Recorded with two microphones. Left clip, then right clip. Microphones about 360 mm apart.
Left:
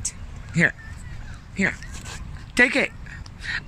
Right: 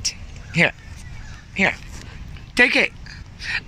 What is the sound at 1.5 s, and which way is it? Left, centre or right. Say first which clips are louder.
Speech: right 5 dB; centre.